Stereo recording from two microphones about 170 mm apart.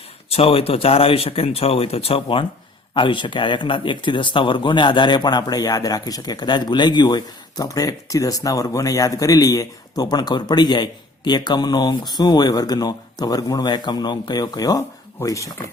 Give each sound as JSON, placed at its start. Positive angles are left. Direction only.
{"t": 0.3, "sound": "speech", "side_deg": 35}